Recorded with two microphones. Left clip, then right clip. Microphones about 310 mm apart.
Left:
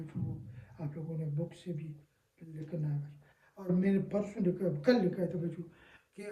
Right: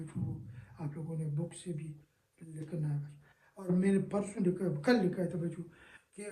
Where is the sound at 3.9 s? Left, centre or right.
Centre.